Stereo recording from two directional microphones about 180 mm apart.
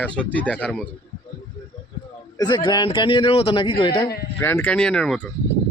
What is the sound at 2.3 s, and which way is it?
A man's voice, 25° left (ahead or behind).